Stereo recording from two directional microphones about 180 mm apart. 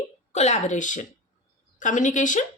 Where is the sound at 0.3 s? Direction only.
40° left (ahead or behind).